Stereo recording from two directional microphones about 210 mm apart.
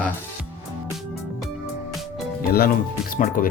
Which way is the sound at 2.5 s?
45° left (ahead or behind).